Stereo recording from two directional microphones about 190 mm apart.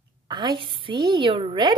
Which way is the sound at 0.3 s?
20° right (ahead or behind).